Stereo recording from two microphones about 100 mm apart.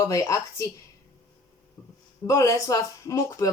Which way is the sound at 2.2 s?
30° left (ahead or behind).